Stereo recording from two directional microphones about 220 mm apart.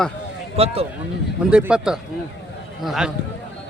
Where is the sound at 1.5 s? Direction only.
5° right (ahead or behind).